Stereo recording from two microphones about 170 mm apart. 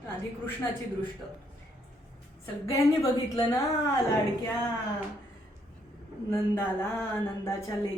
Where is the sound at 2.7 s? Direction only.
20° left (ahead or behind).